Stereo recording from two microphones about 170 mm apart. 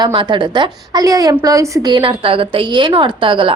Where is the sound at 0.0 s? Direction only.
30° right (ahead or behind).